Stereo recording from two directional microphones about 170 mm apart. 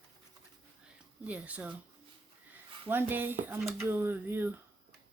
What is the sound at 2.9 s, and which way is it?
Speech, 10° right (ahead or behind).